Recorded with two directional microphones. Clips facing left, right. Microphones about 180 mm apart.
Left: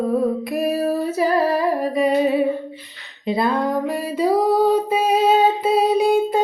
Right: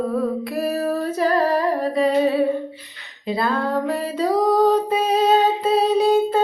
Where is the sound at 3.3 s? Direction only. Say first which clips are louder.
Left 2 dB; 20° left (ahead or behind).